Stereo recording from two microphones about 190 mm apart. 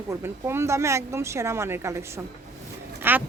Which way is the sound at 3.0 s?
10° right (ahead or behind).